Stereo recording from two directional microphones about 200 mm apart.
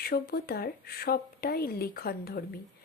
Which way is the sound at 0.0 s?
50° left (ahead or behind).